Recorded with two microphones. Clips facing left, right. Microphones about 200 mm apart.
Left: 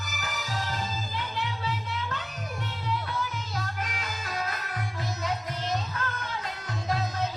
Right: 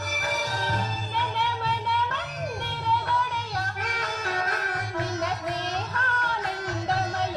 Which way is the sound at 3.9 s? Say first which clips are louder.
Right 5 dB; 80° right.